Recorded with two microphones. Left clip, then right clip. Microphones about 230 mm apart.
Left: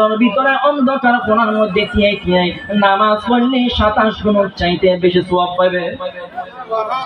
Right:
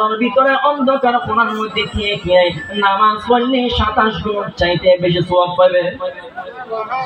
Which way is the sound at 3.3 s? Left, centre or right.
Left.